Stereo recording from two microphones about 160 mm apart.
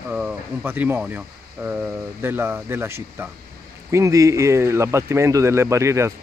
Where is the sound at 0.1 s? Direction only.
10° right (ahead or behind).